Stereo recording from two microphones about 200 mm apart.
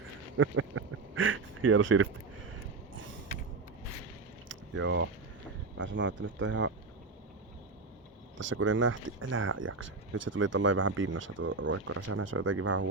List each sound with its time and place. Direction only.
0.3 s speech: 90° right
4.8 s speech: 70° right (ahead or behind)
8.4 s speech: 70° right (ahead or behind)
10.3 s speech: 75° right (ahead or behind)